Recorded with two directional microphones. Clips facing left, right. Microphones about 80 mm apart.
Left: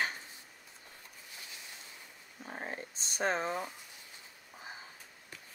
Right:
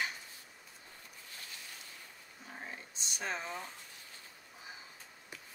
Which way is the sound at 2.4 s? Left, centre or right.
Left.